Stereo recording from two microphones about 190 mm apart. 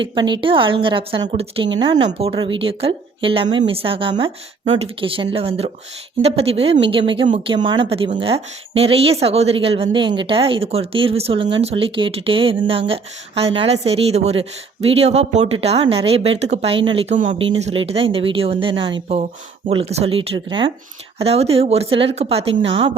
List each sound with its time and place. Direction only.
0.0 s a woman's voice: 25° right (ahead or behind)